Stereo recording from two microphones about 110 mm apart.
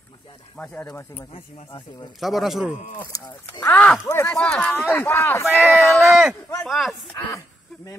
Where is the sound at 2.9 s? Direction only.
40° left (ahead or behind).